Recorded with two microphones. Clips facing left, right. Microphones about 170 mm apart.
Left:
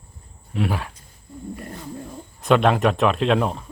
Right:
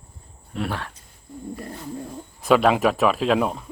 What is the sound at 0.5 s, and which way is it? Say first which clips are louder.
Speech: left 3 dB; 5° left (ahead or behind).